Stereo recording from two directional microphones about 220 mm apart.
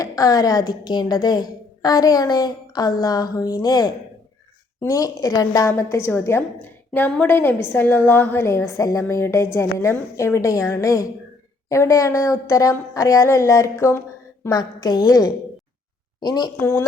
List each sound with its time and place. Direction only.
0.0 s a woman's voice: 15° left (ahead or behind)